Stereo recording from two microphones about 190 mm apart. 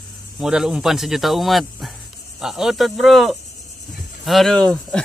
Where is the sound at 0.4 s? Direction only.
5° right (ahead or behind).